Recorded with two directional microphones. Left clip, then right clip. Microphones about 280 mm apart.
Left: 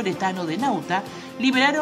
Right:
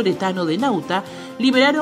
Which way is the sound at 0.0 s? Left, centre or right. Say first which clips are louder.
Right 5 dB; centre.